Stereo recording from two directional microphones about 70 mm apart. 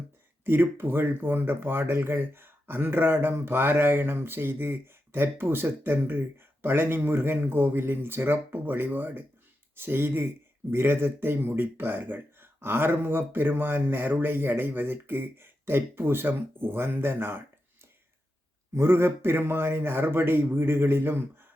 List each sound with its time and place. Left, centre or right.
0.4 s speech: right
18.7 s speech: right